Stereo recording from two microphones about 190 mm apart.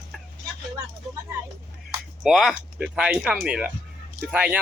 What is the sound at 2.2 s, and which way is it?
Speech, centre (ahead or behind).